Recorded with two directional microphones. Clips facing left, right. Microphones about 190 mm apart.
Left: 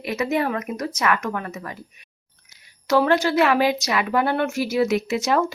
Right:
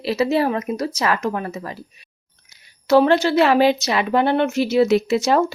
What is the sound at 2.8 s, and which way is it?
Speech, 30° right (ahead or behind).